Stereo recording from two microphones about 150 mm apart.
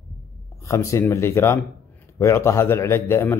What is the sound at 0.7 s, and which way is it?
A man's voice, 20° left (ahead or behind).